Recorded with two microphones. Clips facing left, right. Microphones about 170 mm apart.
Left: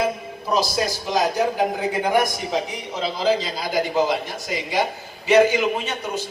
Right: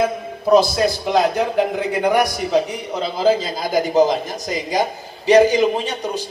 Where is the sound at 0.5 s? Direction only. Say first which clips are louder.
Right 8 dB; 55° right (ahead or behind).